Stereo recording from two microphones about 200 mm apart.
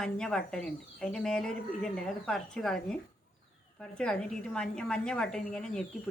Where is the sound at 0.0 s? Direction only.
5° left (ahead or behind).